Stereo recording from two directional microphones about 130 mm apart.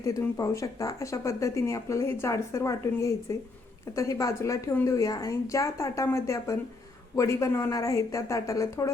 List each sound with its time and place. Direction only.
0.0 s speech: 25° left (ahead or behind)